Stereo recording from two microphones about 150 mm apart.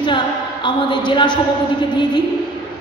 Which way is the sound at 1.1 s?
30° left (ahead or behind).